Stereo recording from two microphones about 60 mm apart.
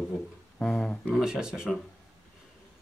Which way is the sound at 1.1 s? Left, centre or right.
Centre.